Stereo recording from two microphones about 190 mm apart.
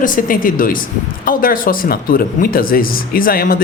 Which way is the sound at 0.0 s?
45° left (ahead or behind).